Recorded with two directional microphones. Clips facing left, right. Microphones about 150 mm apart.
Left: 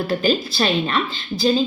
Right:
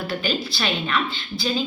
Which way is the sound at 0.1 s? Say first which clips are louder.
Left 7 dB; 40° left (ahead or behind).